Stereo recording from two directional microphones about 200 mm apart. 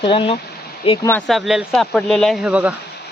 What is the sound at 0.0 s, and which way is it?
Speech, 25° left (ahead or behind).